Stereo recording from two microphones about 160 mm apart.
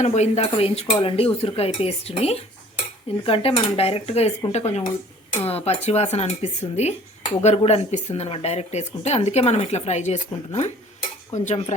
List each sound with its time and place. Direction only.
0.0 s speech: 45° left (ahead or behind)